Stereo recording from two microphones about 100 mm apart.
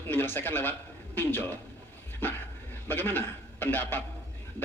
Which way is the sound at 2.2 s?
20° left (ahead or behind).